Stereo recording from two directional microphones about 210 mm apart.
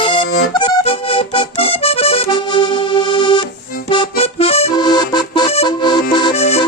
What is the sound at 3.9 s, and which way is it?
Music, 25° left (ahead or behind).